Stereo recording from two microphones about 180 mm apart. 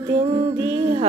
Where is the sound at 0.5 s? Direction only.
30° right (ahead or behind).